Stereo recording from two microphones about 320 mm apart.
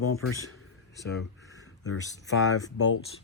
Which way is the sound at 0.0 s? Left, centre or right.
Left.